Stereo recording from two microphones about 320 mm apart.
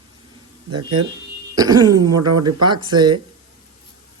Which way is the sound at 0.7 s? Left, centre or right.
Centre.